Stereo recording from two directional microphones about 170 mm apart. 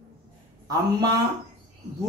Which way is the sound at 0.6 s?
20° right (ahead or behind).